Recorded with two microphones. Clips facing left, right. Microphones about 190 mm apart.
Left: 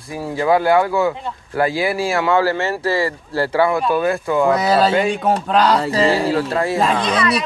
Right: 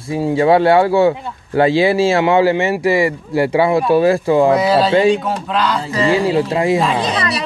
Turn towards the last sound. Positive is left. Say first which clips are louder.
# left 1 dB
turn(degrees=-35)  # may be behind; listen again after turning